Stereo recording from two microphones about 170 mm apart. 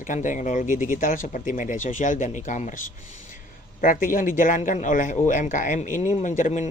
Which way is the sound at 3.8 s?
55° left (ahead or behind).